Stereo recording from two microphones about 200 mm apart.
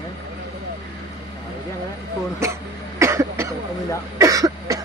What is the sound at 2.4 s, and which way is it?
Speech, 15° right (ahead or behind).